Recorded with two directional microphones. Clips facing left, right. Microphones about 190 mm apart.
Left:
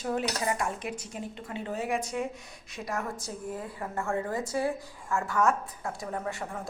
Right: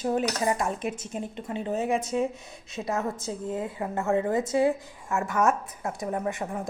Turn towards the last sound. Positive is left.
turn(degrees=-20)  # may be behind; listen again after turning